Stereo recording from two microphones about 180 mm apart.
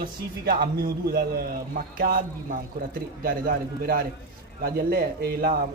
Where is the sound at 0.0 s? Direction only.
55° right (ahead or behind).